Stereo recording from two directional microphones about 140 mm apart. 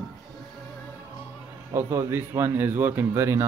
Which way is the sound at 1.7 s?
20° right (ahead or behind).